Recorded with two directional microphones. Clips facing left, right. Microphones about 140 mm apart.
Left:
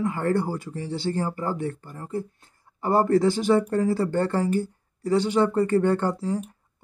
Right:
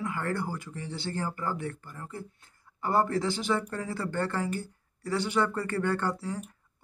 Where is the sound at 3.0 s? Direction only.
45° left (ahead or behind); by 6.4 s 25° left (ahead or behind).